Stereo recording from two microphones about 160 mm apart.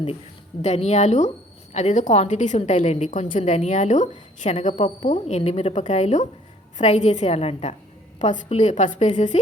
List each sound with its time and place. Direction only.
0.6 s a woman's voice: 45° left (ahead or behind)